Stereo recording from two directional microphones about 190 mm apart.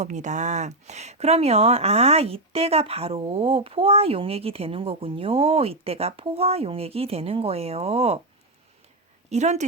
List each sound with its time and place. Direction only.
0.0 s speech: 40° right (ahead or behind)
9.3 s speech: 35° right (ahead or behind)